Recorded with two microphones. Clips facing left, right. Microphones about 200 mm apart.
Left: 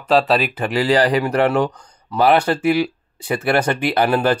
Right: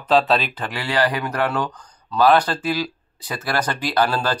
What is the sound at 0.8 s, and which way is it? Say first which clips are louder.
A man's voice: left 6 dB; 35° left (ahead or behind).